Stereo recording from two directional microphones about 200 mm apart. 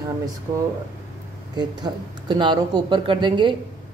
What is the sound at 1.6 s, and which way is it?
Speech, 20° right (ahead or behind).